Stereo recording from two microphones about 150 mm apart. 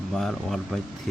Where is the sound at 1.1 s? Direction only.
Centre (ahead or behind).